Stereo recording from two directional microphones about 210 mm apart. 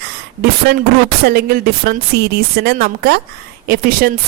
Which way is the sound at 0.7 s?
50° right (ahead or behind).